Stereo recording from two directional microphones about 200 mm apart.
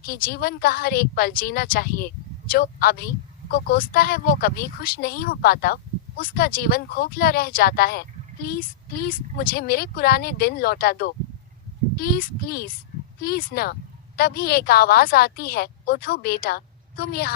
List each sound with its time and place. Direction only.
0.0 s a woman's voice: 50° left (ahead or behind)